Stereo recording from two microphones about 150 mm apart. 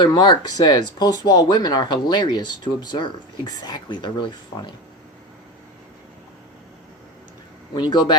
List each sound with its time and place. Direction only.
0.0 s speech: 30° left (ahead or behind)
7.8 s speech: 30° left (ahead or behind)